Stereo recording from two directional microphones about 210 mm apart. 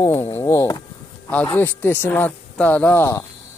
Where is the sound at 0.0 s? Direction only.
15° left (ahead or behind).